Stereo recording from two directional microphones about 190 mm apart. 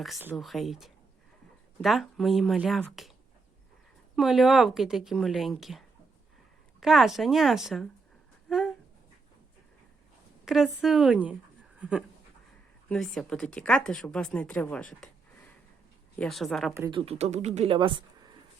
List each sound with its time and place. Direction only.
0.3 s a woman's voice: centre (ahead or behind)
4.1 s a woman's voice: centre (ahead or behind)
8.4 s a sound: centre (ahead or behind)
10.4 s a woman's voice: centre (ahead or behind)
16.1 s a woman's voice: 5° left (ahead or behind)
16.9 s speech: 35° right (ahead or behind)